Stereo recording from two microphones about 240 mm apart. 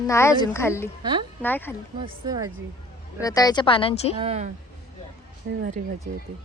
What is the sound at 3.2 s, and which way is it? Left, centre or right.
Speech, centre.